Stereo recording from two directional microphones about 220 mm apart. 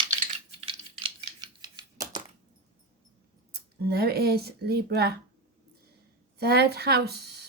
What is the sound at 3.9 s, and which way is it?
Speech, 45° right (ahead or behind).